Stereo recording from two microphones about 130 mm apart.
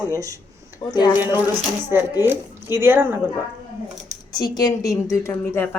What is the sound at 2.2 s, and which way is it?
Speech, 20° right (ahead or behind).